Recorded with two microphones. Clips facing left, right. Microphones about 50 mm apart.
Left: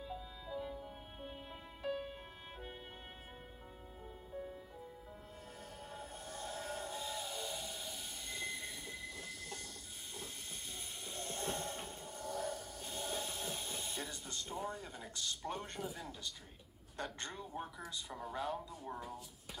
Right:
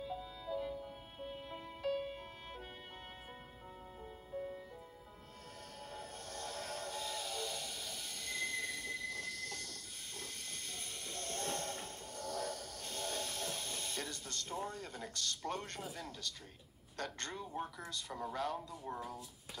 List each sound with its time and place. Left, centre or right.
0.5 s music: centre
1.8 s music: centre
5.9 s train: centre
11.1 s train: centre
14.9 s a man's voice: centre
18.3 s speech: centre
18.9 s speech: centre